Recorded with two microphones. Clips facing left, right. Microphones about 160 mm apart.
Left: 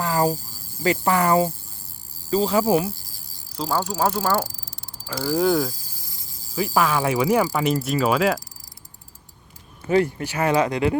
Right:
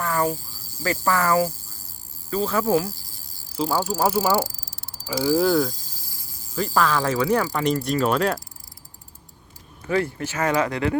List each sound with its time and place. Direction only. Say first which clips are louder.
0.2 s a sound: left 2 dB; 40° left (ahead or behind)
0.8 s speech: left 3 dB; 20° left (ahead or behind)
3.6 s speech: right 1 dB; 5° right (ahead or behind)
6.6 s speech: left 1 dB; 10° left (ahead or behind)
9.9 s speech: left 4 dB; 20° left (ahead or behind)